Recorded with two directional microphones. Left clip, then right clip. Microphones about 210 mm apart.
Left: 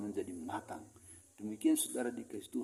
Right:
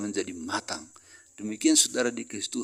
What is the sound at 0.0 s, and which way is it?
Speech, 45° right (ahead or behind).